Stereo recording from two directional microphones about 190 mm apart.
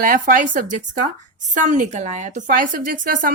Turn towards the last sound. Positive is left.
turn(degrees=-45)  # may be behind; listen again after turning